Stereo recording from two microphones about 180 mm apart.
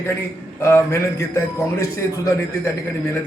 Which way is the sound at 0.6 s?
15° left (ahead or behind).